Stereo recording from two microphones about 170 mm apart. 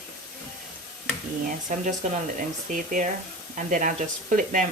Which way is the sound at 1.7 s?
45° right (ahead or behind).